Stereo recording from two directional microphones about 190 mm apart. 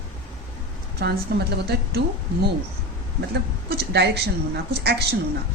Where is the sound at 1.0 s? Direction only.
60° right (ahead or behind).